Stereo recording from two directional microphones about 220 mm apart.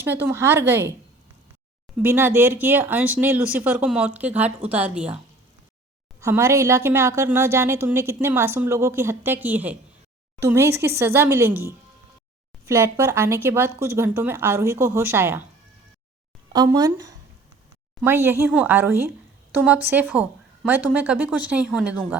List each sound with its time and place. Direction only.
0.0 s speech: 10° right (ahead or behind)
2.0 s speech: 10° right (ahead or behind)
16.5 s speech: 15° right (ahead or behind)